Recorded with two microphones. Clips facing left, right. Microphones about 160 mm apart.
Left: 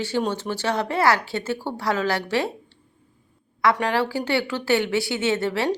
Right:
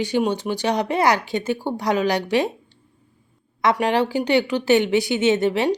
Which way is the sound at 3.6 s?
15° right (ahead or behind).